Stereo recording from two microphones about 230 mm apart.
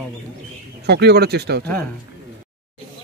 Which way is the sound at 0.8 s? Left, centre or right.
Right.